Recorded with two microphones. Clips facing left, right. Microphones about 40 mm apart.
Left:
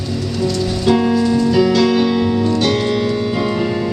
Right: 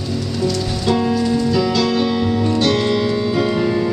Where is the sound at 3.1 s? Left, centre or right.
Centre.